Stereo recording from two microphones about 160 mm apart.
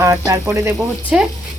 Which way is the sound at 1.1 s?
5° right (ahead or behind).